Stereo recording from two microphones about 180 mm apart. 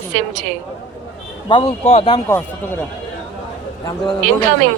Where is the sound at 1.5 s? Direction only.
30° left (ahead or behind).